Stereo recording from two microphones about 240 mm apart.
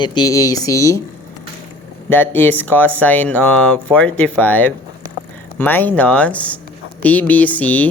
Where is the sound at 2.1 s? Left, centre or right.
Centre.